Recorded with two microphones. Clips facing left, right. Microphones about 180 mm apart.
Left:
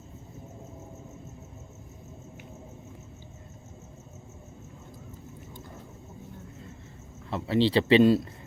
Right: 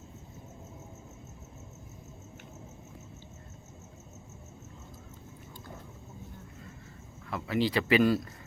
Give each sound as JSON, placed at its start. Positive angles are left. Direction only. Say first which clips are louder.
{"t": 7.3, "sound": "a man's voice", "louder": "left 5 dB", "side_deg": 30}